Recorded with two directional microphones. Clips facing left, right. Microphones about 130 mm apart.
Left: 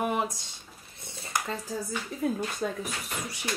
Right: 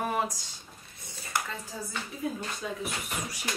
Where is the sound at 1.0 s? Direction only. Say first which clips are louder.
Left 1 dB; 20° left (ahead or behind).